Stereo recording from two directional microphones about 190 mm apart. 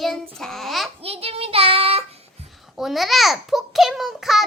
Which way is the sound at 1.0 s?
30° right (ahead or behind).